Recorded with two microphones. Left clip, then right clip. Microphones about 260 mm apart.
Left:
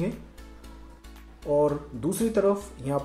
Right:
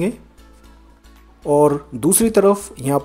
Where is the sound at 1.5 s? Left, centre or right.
Right.